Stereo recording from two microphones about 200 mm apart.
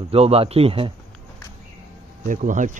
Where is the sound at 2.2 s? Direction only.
40° right (ahead or behind).